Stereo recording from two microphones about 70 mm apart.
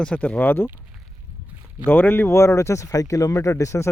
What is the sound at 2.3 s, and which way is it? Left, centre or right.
Speech, left.